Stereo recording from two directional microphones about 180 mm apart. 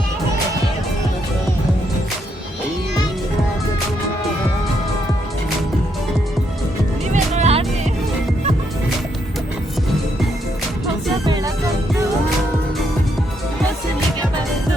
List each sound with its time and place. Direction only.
7.1 s music: 40° right (ahead or behind)